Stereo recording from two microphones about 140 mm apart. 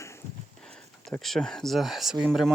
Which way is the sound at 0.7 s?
5° left (ahead or behind).